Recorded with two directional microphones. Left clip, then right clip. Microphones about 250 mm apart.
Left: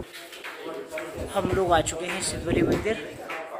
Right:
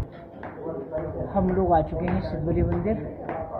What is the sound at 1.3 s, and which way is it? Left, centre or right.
Speech, left.